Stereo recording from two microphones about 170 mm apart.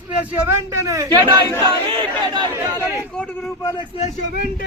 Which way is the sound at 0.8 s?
20° right (ahead or behind).